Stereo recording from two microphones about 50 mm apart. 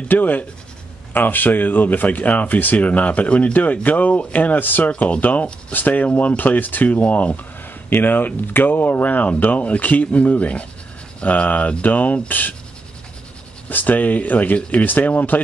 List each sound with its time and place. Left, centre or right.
0.1 s speech: left
7.9 s speech: left
13.7 s speech: left